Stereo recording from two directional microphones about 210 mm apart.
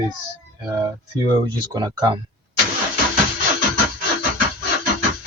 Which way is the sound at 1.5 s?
20° right (ahead or behind).